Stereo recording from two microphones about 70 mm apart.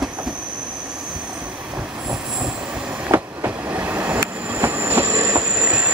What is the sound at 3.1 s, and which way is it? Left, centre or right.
Train, right.